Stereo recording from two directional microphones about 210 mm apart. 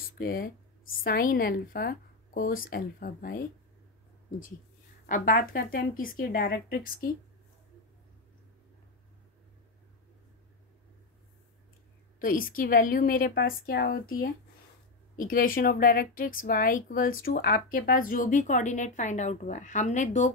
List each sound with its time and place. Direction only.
0.2 s a woman's voice: 45° left (ahead or behind)
5.0 s a woman's voice: 40° left (ahead or behind)
12.2 s a woman's voice: 40° left (ahead or behind)